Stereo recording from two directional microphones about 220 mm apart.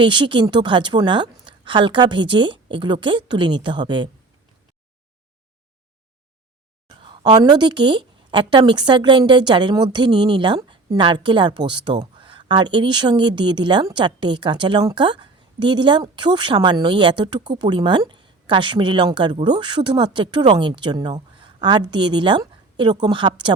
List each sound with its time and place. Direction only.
0.0 s speech: 20° right (ahead or behind)
7.0 s speech: 20° right (ahead or behind)